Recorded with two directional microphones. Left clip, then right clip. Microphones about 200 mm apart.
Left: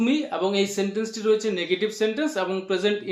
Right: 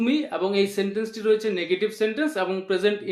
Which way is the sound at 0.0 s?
10° right (ahead or behind).